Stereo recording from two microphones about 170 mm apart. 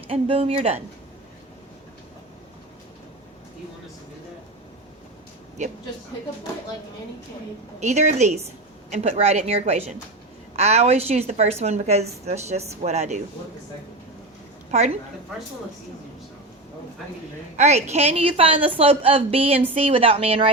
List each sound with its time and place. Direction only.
0.1 s a woman's voice: 35° right (ahead or behind)
7.8 s a woman's voice: 45° right (ahead or behind)
14.7 s a woman's voice: 40° right (ahead or behind)
17.6 s a woman's voice: 40° right (ahead or behind)